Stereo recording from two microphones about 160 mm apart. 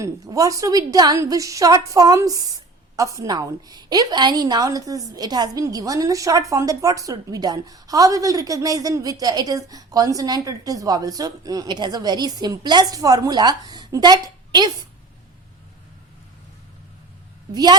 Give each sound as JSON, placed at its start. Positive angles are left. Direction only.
{"t": 0.0, "sound": "a woman's voice", "side_deg": -20}
{"t": 17.5, "sound": "a woman's voice", "side_deg": -25}